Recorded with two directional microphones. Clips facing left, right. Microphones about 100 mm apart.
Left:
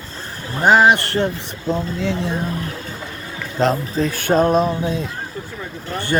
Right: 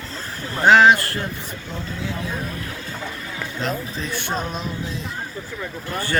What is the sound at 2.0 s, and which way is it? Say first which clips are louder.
Speech: left 7 dB; 80° left.